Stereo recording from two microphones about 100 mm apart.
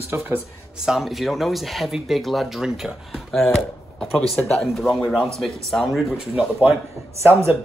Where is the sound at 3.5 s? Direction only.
5° left (ahead or behind).